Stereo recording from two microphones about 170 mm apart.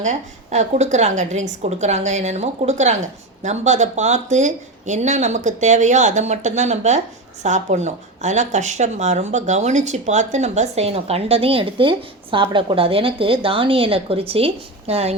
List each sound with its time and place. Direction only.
0.0 s a woman's voice: 45° right (ahead or behind)